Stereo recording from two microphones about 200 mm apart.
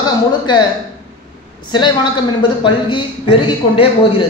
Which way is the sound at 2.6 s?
25° left (ahead or behind).